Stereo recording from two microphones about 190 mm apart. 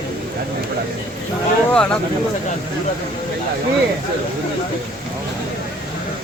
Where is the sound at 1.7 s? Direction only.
5° left (ahead or behind).